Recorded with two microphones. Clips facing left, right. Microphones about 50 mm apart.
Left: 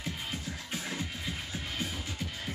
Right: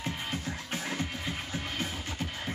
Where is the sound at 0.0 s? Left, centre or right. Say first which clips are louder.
Right 3 dB; right.